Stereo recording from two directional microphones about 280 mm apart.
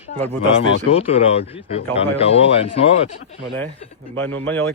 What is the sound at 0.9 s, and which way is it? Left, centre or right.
Speech, left.